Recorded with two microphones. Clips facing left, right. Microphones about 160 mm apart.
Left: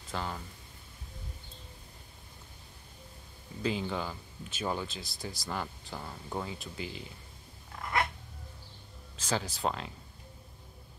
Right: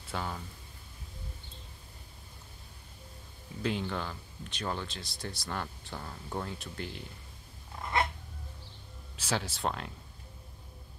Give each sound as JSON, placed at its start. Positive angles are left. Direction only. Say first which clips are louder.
{"t": 0.1, "sound": "speech", "louder": "even", "side_deg": 0}
{"t": 3.6, "sound": "speech", "louder": "left 1 dB", "side_deg": 5}
{"t": 7.8, "sound": "dog", "louder": "right 1 dB", "side_deg": -25}
{"t": 9.1, "sound": "speech", "louder": "even", "side_deg": -5}